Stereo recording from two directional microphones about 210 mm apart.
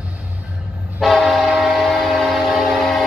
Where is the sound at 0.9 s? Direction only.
Centre (ahead or behind).